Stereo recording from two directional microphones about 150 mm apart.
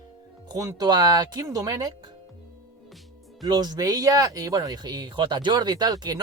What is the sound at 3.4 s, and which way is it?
Speech, 25° right (ahead or behind).